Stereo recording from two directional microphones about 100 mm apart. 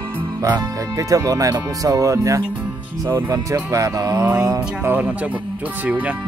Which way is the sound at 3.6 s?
35° right (ahead or behind).